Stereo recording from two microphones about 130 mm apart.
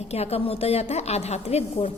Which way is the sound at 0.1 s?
55° left (ahead or behind).